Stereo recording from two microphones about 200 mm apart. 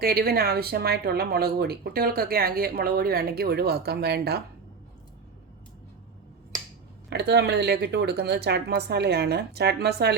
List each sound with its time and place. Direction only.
0.0 s speech: 50° right (ahead or behind)
7.1 s speech: 55° right (ahead or behind)